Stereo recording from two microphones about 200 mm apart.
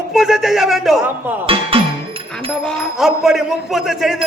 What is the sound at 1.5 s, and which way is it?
Music, 25° right (ahead or behind).